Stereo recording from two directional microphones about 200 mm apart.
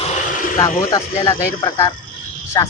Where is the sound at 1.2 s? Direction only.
25° left (ahead or behind).